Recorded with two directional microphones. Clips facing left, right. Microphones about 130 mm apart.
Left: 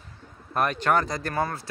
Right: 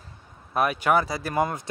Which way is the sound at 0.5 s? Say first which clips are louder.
Right 1 dB; 5° right (ahead or behind).